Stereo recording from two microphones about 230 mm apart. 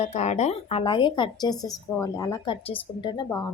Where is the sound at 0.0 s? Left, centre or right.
Left.